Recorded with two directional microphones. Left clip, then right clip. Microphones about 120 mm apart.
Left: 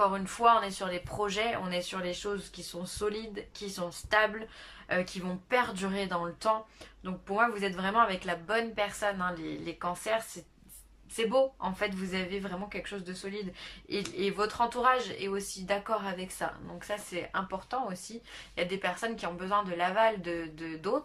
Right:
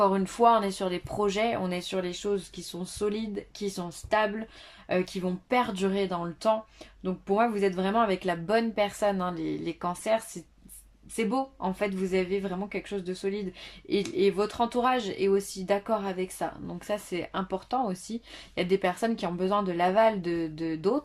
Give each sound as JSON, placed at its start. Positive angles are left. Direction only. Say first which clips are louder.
{"t": 0.0, "sound": "speech", "louder": "right 3 dB", "side_deg": -35}
{"t": 11.2, "sound": "speech", "louder": "left 2 dB", "side_deg": -30}